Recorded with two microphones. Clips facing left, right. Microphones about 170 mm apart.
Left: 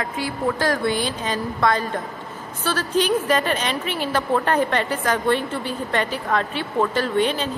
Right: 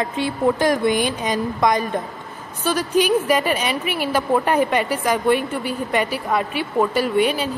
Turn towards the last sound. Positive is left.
turn(degrees=-10)  # may be behind; listen again after turning